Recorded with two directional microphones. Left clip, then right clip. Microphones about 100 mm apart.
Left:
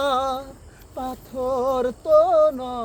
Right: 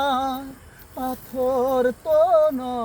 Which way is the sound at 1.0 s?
40° left (ahead or behind).